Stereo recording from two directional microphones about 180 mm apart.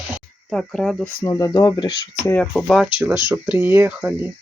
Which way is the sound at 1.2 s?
20° left (ahead or behind).